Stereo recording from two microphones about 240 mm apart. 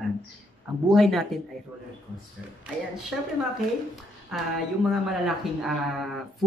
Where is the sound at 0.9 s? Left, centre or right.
Centre.